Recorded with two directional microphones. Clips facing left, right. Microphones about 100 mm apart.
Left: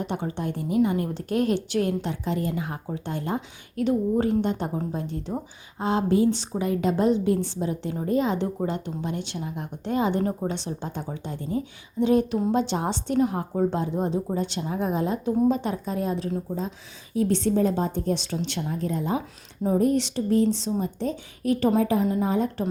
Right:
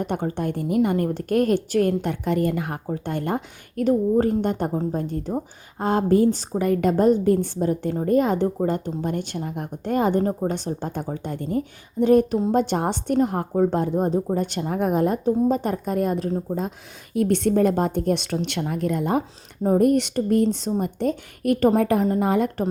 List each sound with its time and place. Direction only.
0.0 s a woman's voice: 50° right (ahead or behind)
15.2 s a woman's voice: 45° right (ahead or behind); by 22.6 s 65° right (ahead or behind)